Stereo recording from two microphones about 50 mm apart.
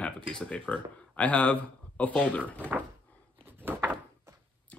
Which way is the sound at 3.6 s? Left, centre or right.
Right.